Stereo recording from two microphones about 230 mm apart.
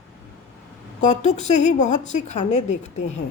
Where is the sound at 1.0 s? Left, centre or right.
Left.